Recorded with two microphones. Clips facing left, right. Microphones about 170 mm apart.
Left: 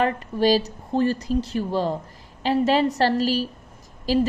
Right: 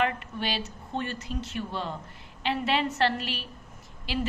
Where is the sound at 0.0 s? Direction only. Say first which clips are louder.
Left 8 dB; 35° left (ahead or behind).